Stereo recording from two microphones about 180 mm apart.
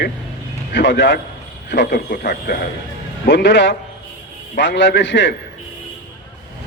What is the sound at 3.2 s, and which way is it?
A man's voice, 80° left.